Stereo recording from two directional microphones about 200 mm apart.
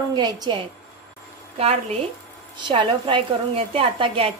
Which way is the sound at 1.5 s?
30° right (ahead or behind).